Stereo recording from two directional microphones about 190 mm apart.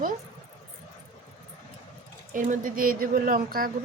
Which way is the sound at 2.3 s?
45° right (ahead or behind).